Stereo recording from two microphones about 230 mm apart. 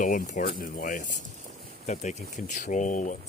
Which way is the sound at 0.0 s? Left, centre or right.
Left.